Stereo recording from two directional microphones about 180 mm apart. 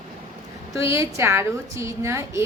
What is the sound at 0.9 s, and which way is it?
A woman's voice, 15° right (ahead or behind).